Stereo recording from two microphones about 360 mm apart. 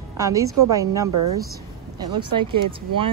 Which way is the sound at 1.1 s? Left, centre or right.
Right.